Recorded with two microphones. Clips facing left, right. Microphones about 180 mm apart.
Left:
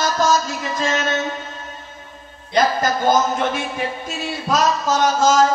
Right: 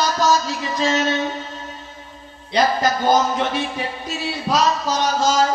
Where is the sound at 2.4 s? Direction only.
45° left (ahead or behind).